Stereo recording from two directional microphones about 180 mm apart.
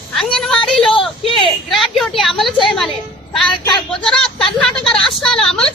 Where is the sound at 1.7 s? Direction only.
Centre (ahead or behind).